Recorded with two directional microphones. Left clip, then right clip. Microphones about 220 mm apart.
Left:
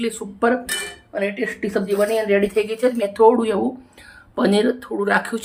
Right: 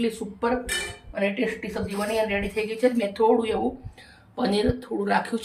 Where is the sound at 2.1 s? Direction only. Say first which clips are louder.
Left 7 dB; 20° left (ahead or behind).